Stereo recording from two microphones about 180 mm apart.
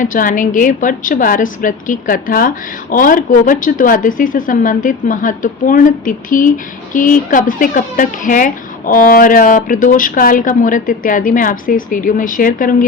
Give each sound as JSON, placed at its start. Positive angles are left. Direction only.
{"t": 0.0, "sound": "speech", "side_deg": 45}